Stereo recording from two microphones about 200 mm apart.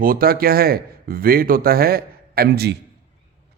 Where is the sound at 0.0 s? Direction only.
45° right (ahead or behind).